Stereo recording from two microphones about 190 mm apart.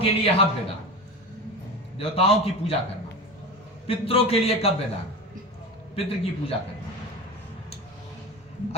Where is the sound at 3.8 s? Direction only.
30° left (ahead or behind).